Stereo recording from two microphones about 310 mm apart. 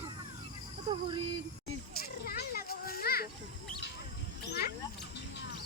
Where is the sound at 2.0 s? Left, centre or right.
Left.